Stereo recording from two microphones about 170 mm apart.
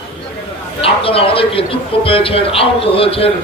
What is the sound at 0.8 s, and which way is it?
A man's voice, 35° left (ahead or behind).